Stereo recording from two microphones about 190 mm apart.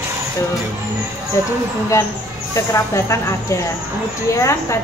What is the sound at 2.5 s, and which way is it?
Speech, 15° left (ahead or behind).